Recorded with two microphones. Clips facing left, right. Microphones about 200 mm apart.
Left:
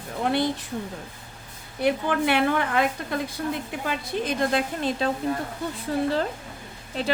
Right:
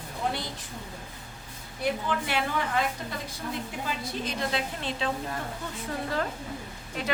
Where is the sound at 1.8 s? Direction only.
65° left (ahead or behind); by 5.0 s 45° left (ahead or behind).